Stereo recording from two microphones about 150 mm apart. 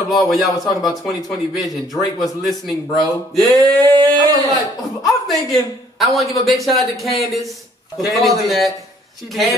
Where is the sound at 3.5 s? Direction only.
25° right (ahead or behind).